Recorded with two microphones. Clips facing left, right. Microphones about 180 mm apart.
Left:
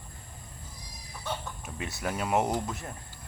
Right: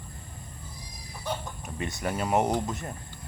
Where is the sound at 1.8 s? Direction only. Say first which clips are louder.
Right 3 dB; 5° left (ahead or behind).